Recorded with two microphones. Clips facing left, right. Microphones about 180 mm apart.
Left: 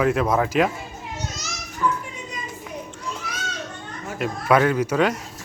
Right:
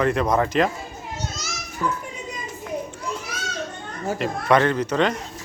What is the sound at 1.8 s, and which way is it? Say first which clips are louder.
Speech: left 2 dB; 25° right (ahead or behind).